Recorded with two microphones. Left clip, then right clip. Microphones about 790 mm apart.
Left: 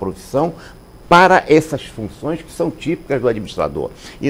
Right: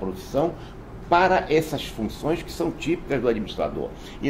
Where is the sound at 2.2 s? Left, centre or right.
Left.